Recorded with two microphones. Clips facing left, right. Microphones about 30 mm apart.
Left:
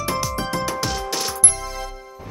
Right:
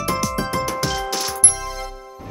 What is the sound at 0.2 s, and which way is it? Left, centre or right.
Music, centre.